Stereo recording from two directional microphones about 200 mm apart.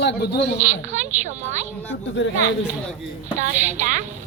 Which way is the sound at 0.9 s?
35° right (ahead or behind).